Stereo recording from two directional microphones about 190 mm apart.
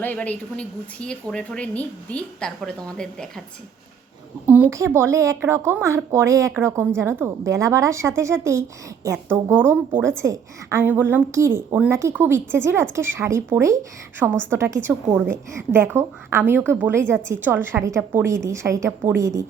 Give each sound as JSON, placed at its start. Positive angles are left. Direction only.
{"t": 0.0, "sound": "a woman's voice", "side_deg": 10}
{"t": 4.4, "sound": "a woman's voice", "side_deg": -10}